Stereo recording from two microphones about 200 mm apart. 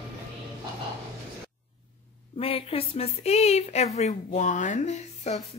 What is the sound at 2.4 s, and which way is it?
A woman's voice, 30° left (ahead or behind).